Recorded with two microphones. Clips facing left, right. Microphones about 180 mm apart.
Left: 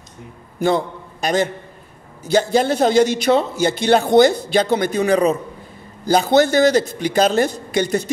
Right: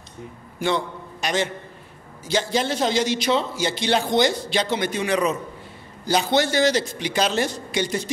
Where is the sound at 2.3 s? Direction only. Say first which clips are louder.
Left 7 dB; 55° left (ahead or behind); by 5.4 s 35° left (ahead or behind).